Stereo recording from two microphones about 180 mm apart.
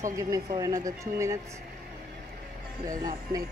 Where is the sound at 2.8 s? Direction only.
20° right (ahead or behind).